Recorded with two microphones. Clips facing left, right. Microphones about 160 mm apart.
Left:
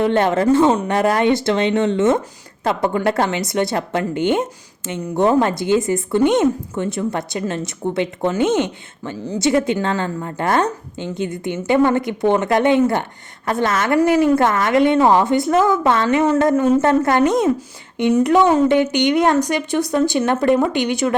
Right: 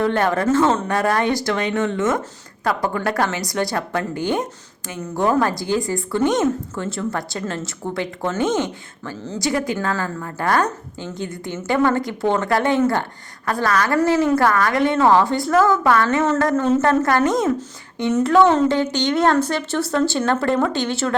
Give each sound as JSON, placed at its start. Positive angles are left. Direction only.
{"t": 0.0, "sound": "a woman's voice", "side_deg": 20}